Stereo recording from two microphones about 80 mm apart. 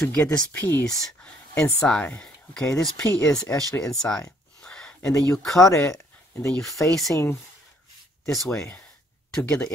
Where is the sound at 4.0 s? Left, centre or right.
Centre.